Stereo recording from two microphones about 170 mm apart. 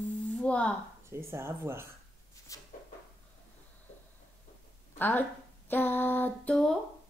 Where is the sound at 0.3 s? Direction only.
5° left (ahead or behind).